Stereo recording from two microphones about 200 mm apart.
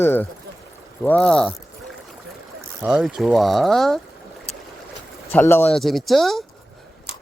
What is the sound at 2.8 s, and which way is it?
Speech, 5° right (ahead or behind).